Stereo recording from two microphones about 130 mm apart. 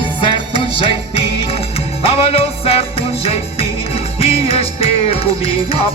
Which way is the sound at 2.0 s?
50° left (ahead or behind).